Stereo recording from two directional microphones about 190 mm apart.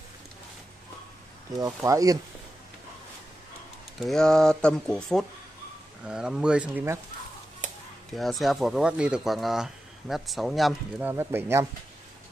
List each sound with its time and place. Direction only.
1.6 s speech: 15° right (ahead or behind)
4.0 s speech: centre (ahead or behind)
8.1 s speech: centre (ahead or behind)
11.1 s speech: 10° right (ahead or behind)